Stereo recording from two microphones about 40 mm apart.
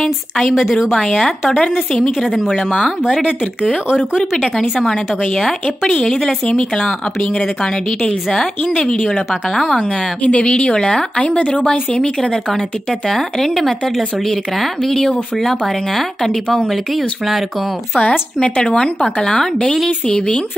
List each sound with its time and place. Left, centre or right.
0.4 s a woman's voice: centre
2.3 s a woman's voice: centre
2.8 s speech: centre
4.6 s a woman's voice: centre
5.9 s speech: centre
9.0 s speech: centre
10.2 s a woman's voice: left
11.3 s speech: left
11.9 s a woman's voice: left
13.1 s speech: centre
14.8 s a woman's voice: centre
18.4 s a woman's voice: left